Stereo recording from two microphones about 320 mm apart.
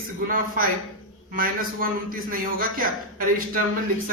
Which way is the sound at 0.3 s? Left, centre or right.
Right.